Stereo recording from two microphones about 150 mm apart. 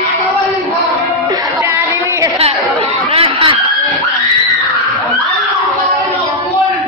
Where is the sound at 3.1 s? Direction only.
35° right (ahead or behind).